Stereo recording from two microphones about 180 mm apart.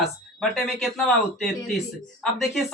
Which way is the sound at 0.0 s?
Centre (ahead or behind).